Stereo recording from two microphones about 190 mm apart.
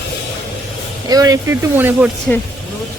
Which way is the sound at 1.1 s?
20° right (ahead or behind).